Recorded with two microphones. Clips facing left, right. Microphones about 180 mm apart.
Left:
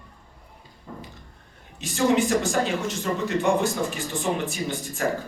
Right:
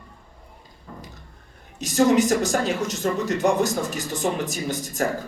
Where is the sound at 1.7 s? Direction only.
40° right (ahead or behind).